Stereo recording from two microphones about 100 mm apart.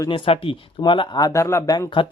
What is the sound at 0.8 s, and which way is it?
Speech, 50° left (ahead or behind).